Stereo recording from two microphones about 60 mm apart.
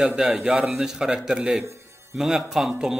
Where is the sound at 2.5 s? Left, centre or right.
Centre.